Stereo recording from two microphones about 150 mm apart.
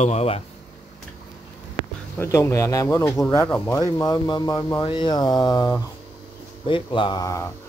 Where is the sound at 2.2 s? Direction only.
20° left (ahead or behind).